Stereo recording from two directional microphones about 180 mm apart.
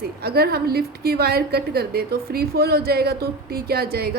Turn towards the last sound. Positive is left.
turn(degrees=-60)  # may be behind; listen again after turning